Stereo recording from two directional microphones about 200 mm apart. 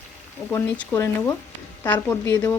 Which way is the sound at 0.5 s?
15° left (ahead or behind).